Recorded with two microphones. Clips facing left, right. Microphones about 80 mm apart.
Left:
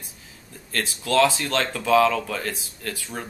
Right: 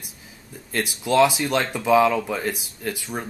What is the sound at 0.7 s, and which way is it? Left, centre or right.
Speech, centre.